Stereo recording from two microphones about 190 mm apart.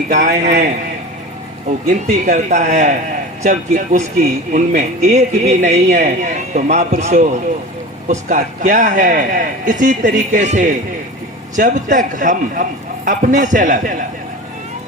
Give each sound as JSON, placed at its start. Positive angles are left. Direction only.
{"t": 0.1, "sound": "speech", "side_deg": -40}
{"t": 2.2, "sound": "a man's voice", "side_deg": -40}